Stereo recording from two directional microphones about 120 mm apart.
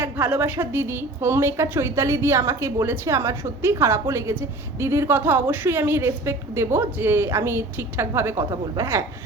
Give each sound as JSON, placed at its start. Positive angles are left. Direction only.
{"t": 0.0, "sound": "a woman's voice", "side_deg": -15}